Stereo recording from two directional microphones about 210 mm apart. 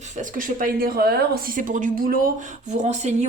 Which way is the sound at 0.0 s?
35° right (ahead or behind).